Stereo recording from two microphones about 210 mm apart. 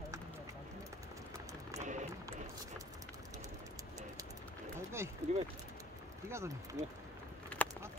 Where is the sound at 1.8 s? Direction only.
35° right (ahead or behind).